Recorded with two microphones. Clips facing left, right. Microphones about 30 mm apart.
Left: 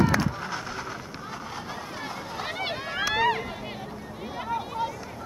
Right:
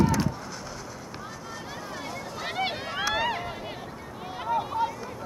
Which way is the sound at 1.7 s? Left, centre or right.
Left.